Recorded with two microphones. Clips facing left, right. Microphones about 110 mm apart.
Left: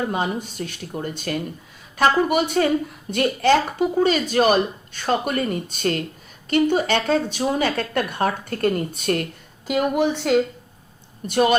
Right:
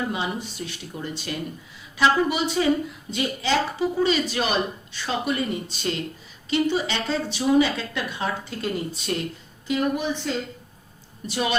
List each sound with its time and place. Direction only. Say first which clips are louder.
0.0 s speech: left 4 dB; 45° left (ahead or behind)
9.6 s speech: left 4 dB; 70° left (ahead or behind)
11.3 s speech: left 8 dB; 50° left (ahead or behind)